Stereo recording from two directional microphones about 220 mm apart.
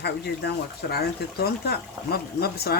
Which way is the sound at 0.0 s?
45° left (ahead or behind).